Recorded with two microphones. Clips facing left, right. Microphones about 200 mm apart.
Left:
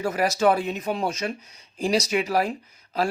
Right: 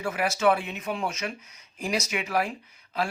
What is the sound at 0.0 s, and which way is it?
Speech, 40° left (ahead or behind).